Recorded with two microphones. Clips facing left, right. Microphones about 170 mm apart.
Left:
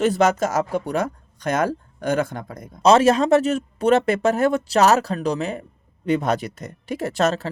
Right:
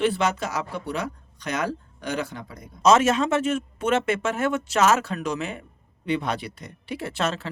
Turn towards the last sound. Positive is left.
turn(degrees=40)  # may be behind; listen again after turning